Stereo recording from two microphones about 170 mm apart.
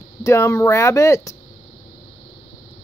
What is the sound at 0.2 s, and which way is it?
Speech, 15° left (ahead or behind).